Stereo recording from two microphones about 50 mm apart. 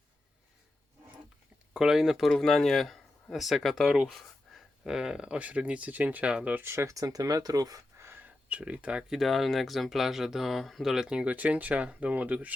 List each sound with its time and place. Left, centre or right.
1.7 s speech: centre
2.3 s speech: centre
4.1 s a sound: centre
4.8 s speech: centre
6.5 s speech: right
7.1 s speech: right
7.9 s a sound: right
8.2 s speech: right
9.1 s speech: centre
11.3 s speech: right